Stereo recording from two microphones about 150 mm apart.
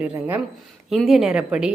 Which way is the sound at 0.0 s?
15° right (ahead or behind).